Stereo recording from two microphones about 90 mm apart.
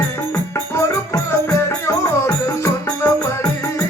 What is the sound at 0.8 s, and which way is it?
Music, 35° left (ahead or behind).